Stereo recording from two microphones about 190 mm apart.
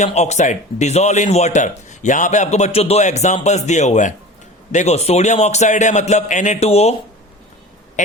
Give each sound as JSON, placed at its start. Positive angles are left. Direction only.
{"t": 0.0, "sound": "speech", "side_deg": 35}
{"t": 8.0, "sound": "speech", "side_deg": 40}